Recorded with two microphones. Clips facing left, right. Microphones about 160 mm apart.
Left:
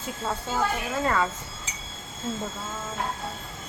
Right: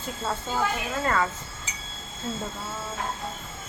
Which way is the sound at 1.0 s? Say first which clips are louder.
Even; 5° left (ahead or behind).